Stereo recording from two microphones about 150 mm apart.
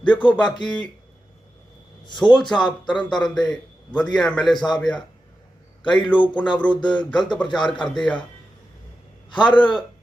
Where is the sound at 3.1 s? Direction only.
5° left (ahead or behind).